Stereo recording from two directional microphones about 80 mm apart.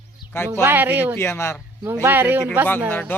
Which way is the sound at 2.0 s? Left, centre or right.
Right.